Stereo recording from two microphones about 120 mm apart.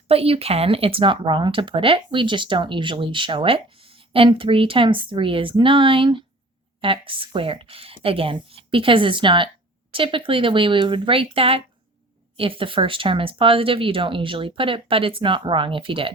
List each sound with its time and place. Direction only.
0.1 s speech: 55° right (ahead or behind)